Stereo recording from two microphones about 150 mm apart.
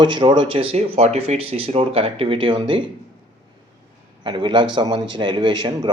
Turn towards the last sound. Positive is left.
turn(degrees=-30)  # may be behind; listen again after turning